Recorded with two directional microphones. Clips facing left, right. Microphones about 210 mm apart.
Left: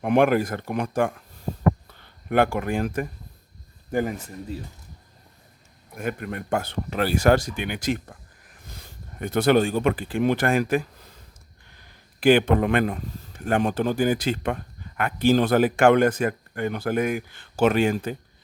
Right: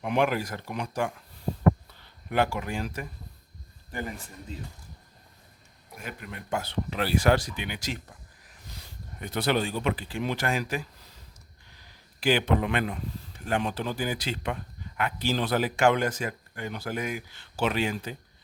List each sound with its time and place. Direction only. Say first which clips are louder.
0.0 s speech: left 7 dB; 55° left (ahead or behind)
2.3 s speech: left 6 dB; 55° left (ahead or behind)
6.0 s speech: left 11 dB; 55° left (ahead or behind)